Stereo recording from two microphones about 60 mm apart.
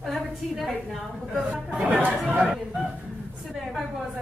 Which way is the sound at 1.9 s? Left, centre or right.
Right.